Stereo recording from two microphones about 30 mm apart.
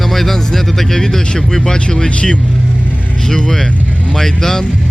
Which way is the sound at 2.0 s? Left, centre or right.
Left.